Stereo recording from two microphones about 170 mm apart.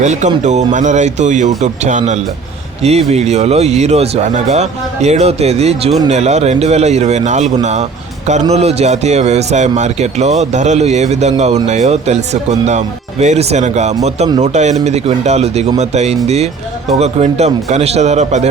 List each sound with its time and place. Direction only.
0.0 s speech: 45° right (ahead or behind)